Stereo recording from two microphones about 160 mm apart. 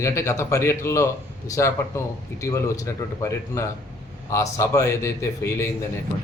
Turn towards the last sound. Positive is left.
turn(degrees=15)  # may be behind; listen again after turning